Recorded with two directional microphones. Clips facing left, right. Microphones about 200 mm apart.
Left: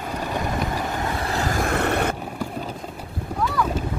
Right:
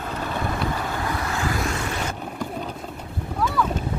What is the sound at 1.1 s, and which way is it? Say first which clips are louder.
Vehicle: left 2 dB; 35° left (ahead or behind).